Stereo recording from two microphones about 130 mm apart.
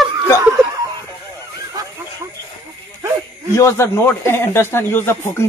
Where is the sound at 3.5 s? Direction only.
20° left (ahead or behind).